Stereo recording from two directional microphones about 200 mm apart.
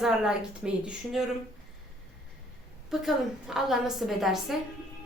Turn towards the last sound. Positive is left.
turn(degrees=0)  # may be behind; listen again after turning